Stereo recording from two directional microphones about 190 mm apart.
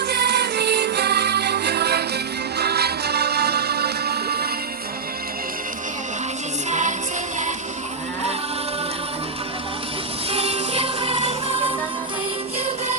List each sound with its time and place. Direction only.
0.0 s music: 60° right (ahead or behind)
6.7 s music: 40° right (ahead or behind)
10.3 s music: 30° right (ahead or behind)